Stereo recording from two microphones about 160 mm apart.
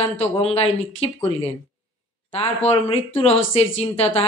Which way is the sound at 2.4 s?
40° left (ahead or behind).